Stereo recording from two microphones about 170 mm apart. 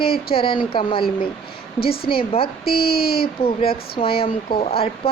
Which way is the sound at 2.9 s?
65° left (ahead or behind).